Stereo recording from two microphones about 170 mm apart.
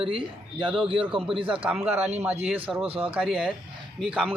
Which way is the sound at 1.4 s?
30° right (ahead or behind).